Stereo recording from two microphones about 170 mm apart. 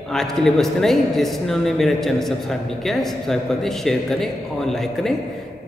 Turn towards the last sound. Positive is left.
turn(degrees=0)  # may be behind; listen again after turning